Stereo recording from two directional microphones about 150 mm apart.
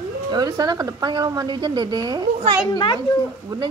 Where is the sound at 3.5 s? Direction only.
25° right (ahead or behind).